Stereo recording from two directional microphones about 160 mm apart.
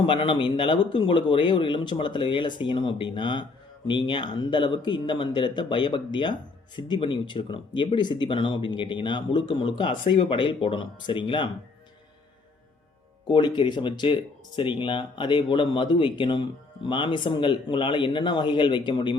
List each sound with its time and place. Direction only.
0.0 s speech: 30° left (ahead or behind)
13.2 s speech: 30° left (ahead or behind)